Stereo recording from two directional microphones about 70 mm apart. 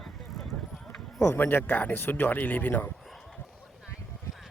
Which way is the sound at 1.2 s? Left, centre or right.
Left.